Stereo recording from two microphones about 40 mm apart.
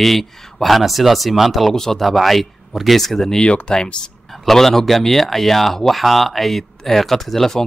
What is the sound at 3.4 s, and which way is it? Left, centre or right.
Speech, left.